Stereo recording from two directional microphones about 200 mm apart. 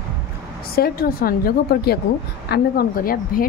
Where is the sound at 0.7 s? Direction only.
50° left (ahead or behind).